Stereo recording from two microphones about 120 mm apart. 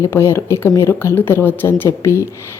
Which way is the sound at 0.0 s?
20° left (ahead or behind).